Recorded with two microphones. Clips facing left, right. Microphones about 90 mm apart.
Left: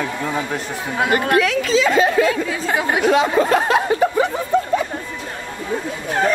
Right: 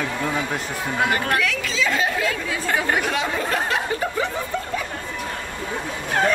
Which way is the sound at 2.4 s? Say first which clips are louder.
Left 2 dB; 10° left (ahead or behind).